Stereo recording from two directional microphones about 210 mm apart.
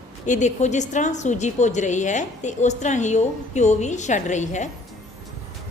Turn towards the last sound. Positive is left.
turn(degrees=35)  # may be behind; listen again after turning